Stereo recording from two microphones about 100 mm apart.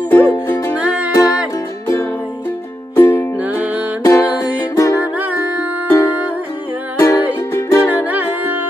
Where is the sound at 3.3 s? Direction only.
15° right (ahead or behind).